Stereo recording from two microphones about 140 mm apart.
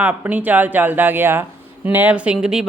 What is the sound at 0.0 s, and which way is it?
Speech, 10° right (ahead or behind).